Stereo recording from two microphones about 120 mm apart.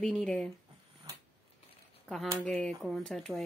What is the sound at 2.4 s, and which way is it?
Speech, 5° left (ahead or behind).